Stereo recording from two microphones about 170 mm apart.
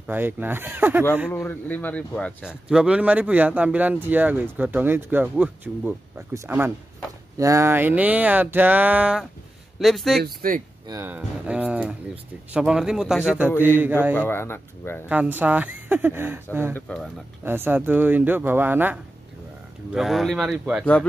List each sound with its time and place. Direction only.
0.0 s speech: 10° right (ahead or behind)
1.3 s speech: 10° left (ahead or behind)
2.4 s speech: 5° right (ahead or behind)
10.2 s speech: 55° right (ahead or behind)
10.9 s speech: 15° right (ahead or behind)
14.1 s speech: 10° left (ahead or behind)
15.0 s speech: 10° right (ahead or behind)
16.7 s speech: 5° left (ahead or behind)
17.5 s speech: 10° right (ahead or behind)
19.9 s speech: centre (ahead or behind)